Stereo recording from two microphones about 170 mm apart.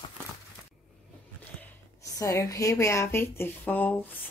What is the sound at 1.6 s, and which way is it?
A woman's voice, 20° left (ahead or behind).